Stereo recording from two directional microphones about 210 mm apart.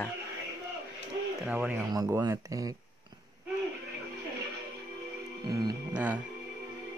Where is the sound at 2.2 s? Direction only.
15° right (ahead or behind).